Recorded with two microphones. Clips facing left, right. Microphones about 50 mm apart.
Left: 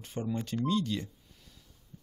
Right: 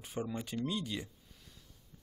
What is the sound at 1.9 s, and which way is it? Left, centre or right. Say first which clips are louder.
Heart sounds: left 8 dB; centre.